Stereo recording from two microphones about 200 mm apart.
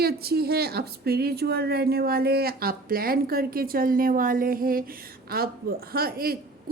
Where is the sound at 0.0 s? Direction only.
50° right (ahead or behind).